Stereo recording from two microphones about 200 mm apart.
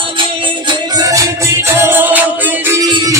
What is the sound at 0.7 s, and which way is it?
Music, 15° right (ahead or behind).